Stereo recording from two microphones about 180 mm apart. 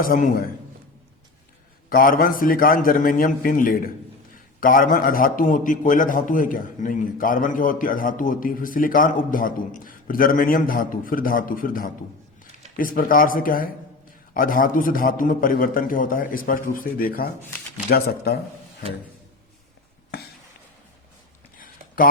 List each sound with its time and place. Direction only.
0.0 s a man's voice: 50° left (ahead or behind)
1.9 s a man's voice: 50° left (ahead or behind)
21.6 s a sound: 50° left (ahead or behind)